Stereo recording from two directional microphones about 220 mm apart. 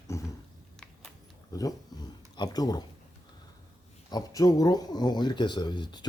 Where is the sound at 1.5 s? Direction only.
15° left (ahead or behind).